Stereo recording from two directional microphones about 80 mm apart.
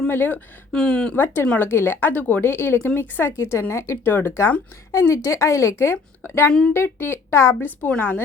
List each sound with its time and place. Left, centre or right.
0.1 s a woman's voice: left
0.7 s speech: centre
1.1 s a woman's voice: left
4.9 s a woman's voice: left
7.6 s a woman's voice: left